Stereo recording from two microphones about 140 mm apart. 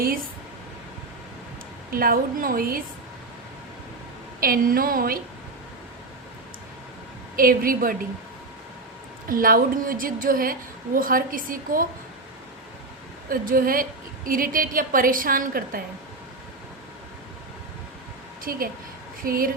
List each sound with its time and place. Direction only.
1.9 s a woman's voice: 90° right
4.4 s a woman's voice: 90° right
7.3 s a woman's voice: 90° right
9.3 s a woman's voice: 90° right
13.2 s a woman's voice: 85° right
18.5 s a woman's voice: 90° right